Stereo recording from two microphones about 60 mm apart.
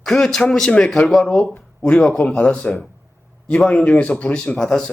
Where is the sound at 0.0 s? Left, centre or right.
Centre.